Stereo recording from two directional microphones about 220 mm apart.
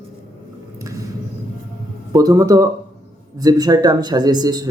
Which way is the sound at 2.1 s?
15° right (ahead or behind).